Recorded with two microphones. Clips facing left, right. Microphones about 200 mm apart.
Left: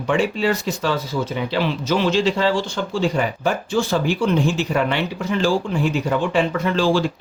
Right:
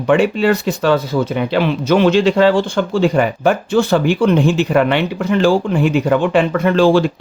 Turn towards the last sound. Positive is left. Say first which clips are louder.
# right 7 dB
turn(degrees=-60)  # may be behind; listen again after turning